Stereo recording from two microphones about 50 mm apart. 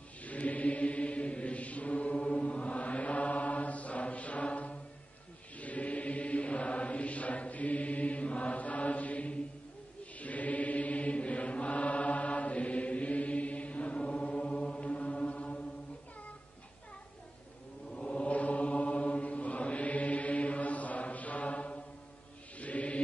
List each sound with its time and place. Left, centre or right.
0.2 s mantra: left
17.9 s mantra: left
22.6 s music: left